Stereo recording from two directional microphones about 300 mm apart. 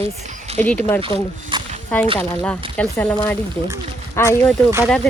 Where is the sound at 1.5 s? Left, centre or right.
Centre.